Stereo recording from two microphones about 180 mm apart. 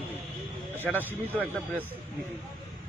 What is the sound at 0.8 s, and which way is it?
Speech, 10° right (ahead or behind).